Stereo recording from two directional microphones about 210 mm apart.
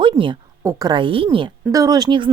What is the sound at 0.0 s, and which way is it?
A woman's voice, 25° right (ahead or behind).